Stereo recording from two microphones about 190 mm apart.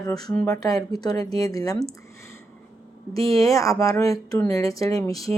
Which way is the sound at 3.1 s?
15° left (ahead or behind).